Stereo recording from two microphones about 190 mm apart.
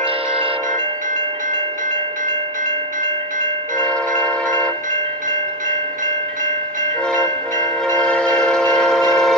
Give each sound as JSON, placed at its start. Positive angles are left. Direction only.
{"t": 3.8, "sound": "train", "side_deg": 5}
{"t": 4.9, "sound": "train", "side_deg": -40}
{"t": 7.1, "sound": "train", "side_deg": 5}